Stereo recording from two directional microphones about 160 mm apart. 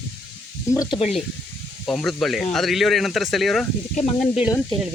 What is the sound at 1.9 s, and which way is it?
Speech, centre (ahead or behind).